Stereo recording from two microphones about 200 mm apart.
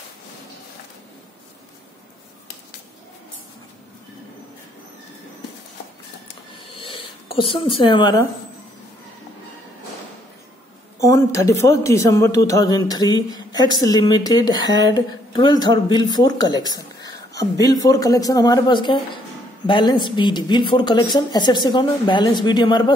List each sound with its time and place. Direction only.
6.8 s speech: 25° left (ahead or behind)
11.0 s speech: 15° left (ahead or behind)